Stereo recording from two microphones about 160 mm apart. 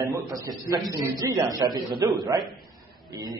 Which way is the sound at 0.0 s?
20° right (ahead or behind).